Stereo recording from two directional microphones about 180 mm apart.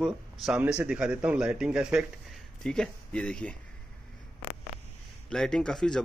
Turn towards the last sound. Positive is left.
turn(degrees=5)  # may be behind; listen again after turning